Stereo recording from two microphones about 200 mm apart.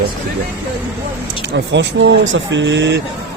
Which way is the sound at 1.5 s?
65° right (ahead or behind).